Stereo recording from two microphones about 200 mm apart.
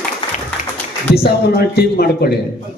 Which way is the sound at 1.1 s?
50° left (ahead or behind).